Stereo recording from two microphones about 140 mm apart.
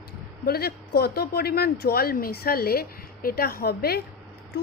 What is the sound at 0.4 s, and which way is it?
Speech, 90° left.